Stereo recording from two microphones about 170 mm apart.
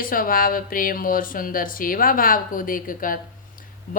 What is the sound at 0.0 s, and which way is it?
A woman's voice, 55° left (ahead or behind).